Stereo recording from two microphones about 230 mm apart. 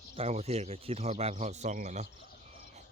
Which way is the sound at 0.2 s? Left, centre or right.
Right.